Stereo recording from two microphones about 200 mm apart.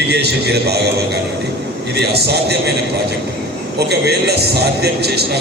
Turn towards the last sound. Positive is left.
turn(degrees=-55)  # may be behind; listen again after turning